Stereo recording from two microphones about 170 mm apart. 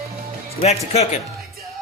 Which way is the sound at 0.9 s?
40° left (ahead or behind).